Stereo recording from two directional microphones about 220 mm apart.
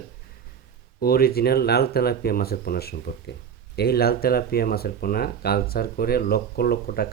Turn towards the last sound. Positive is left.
turn(degrees=45)  # may be behind; listen again after turning